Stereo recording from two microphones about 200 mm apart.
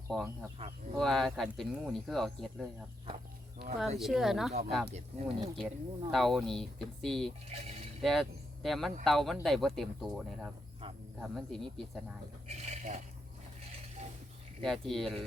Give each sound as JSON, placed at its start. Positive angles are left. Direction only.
{"t": 0.1, "sound": "speech", "side_deg": 0}
{"t": 3.8, "sound": "speech", "side_deg": 0}
{"t": 7.5, "sound": "speech", "side_deg": -30}
{"t": 8.0, "sound": "speech", "side_deg": 0}
{"t": 12.5, "sound": "speech", "side_deg": -35}
{"t": 14.6, "sound": "speech", "side_deg": 0}